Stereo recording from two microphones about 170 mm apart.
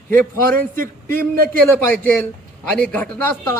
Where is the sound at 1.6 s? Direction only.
10° left (ahead or behind).